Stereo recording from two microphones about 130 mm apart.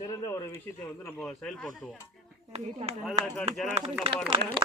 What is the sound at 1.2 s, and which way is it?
Speech, 5° left (ahead or behind).